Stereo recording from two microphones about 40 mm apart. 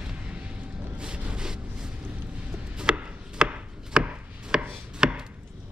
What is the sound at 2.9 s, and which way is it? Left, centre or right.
Chopping, right.